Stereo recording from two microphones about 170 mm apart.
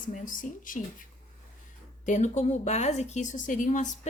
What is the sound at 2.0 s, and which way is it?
Speech, 45° left (ahead or behind).